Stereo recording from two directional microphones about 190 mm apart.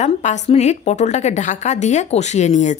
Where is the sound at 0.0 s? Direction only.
40° left (ahead or behind).